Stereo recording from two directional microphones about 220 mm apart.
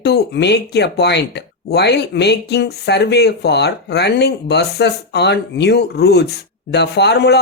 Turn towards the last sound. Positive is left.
turn(degrees=50)  # may be behind; listen again after turning